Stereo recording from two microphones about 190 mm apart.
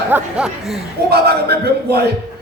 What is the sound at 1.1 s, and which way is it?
Music, 55° right (ahead or behind).